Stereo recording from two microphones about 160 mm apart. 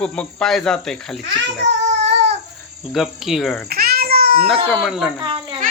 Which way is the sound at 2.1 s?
90° right.